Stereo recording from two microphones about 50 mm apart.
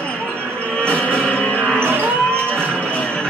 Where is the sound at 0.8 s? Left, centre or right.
Left.